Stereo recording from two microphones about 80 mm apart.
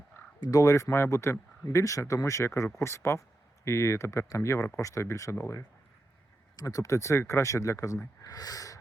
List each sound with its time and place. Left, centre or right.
0.3 s speech: left
0.6 s speech: left
8.2 s speech: left